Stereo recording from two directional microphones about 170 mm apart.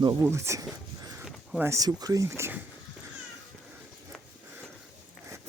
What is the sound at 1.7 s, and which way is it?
Speech, 20° right (ahead or behind).